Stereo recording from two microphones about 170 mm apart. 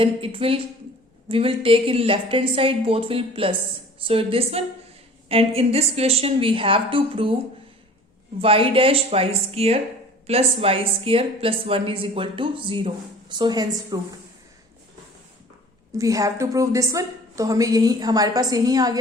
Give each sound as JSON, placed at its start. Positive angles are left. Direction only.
{"t": 0.0, "sound": "speech", "side_deg": -35}
{"t": 8.4, "sound": "speech", "side_deg": -35}
{"t": 16.0, "sound": "a woman's voice", "side_deg": -20}